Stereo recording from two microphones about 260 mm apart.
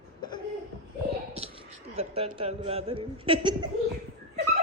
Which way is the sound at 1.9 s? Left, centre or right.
Right.